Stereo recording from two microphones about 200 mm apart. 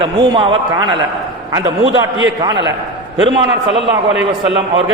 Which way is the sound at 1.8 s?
70° right (ahead or behind).